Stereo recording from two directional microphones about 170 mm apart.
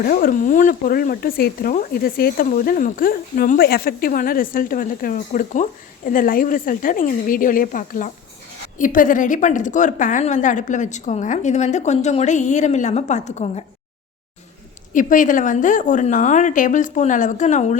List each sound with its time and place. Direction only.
0.0 s a woman's voice: 60° left (ahead or behind); by 13.7 s 40° left (ahead or behind)
14.9 s a woman's voice: 50° left (ahead or behind)